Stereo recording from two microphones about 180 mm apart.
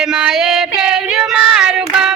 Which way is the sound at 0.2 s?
5° right (ahead or behind).